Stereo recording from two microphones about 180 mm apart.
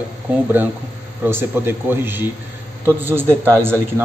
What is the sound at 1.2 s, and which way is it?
A man's voice, 10° right (ahead or behind).